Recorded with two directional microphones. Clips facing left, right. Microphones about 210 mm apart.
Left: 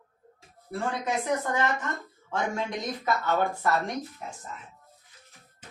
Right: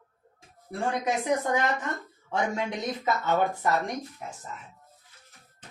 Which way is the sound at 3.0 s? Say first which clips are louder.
Right 1 dB; 20° right (ahead or behind).